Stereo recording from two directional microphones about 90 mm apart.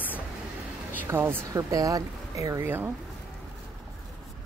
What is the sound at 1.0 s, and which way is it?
Speech, 25° right (ahead or behind).